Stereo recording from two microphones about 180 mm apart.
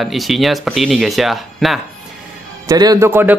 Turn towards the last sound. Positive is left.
turn(degrees=-10)  # may be behind; listen again after turning